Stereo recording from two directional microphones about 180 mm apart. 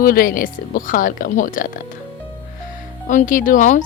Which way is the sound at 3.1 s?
45° left (ahead or behind).